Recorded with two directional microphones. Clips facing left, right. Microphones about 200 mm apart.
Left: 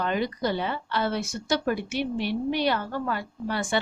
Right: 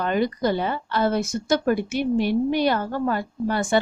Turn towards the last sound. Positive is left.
turn(degrees=-45)  # may be behind; listen again after turning